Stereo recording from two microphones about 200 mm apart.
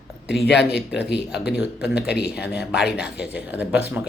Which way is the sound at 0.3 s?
55° left (ahead or behind).